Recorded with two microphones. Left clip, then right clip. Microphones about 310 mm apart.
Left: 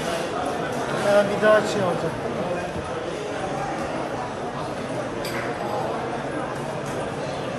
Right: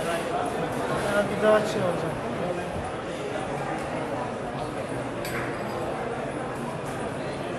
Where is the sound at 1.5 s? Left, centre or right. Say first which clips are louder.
Left 3 dB; left.